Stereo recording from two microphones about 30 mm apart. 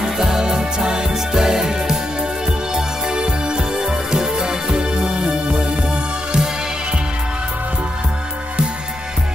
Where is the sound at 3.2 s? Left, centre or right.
Right.